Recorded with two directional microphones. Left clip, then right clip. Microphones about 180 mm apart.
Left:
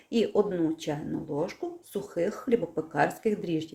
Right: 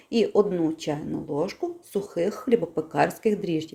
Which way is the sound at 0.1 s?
15° right (ahead or behind).